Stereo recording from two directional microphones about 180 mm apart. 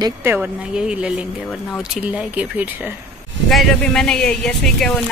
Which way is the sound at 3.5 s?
Centre (ahead or behind).